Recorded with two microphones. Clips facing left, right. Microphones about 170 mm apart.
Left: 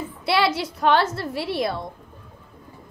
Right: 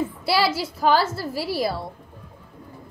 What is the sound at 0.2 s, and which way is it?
A woman's voice, centre (ahead or behind).